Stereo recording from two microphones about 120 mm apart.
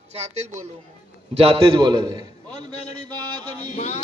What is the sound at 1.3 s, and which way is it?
Speech, 50° right (ahead or behind).